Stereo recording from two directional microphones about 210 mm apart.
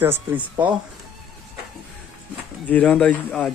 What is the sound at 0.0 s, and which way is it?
Speech, 10° right (ahead or behind).